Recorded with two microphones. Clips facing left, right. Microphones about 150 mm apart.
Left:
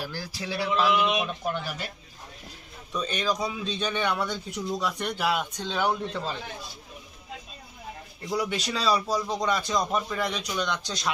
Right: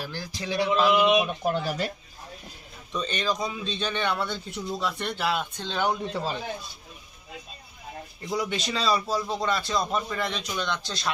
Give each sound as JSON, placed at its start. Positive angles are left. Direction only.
{"t": 0.0, "sound": "speech", "side_deg": 10}
{"t": 1.0, "sound": "a man's voice", "side_deg": -15}
{"t": 1.5, "sound": "speech", "side_deg": -35}
{"t": 2.9, "sound": "speech", "side_deg": 10}
{"t": 5.9, "sound": "a man's voice", "side_deg": -10}
{"t": 8.2, "sound": "speech", "side_deg": 5}